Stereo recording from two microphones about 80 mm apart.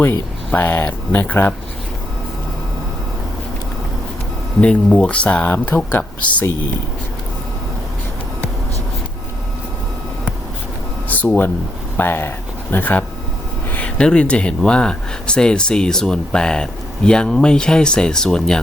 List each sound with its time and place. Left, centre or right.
0.5 s speech: left
4.6 s speech: centre
11.1 s speech: centre